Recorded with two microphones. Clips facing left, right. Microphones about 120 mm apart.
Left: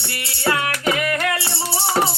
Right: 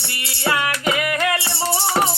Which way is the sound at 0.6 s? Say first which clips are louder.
Even; 20° right (ahead or behind).